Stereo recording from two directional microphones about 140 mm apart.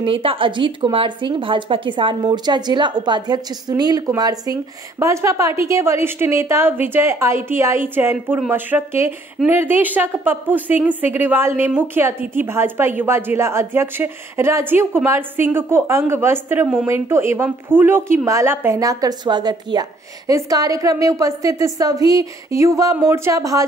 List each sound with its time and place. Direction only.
0.0 s a woman's voice: 40° right (ahead or behind); by 23.6 s 25° right (ahead or behind)